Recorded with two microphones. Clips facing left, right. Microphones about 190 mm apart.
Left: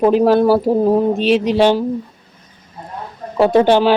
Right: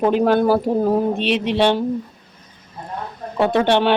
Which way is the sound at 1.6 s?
10° left (ahead or behind).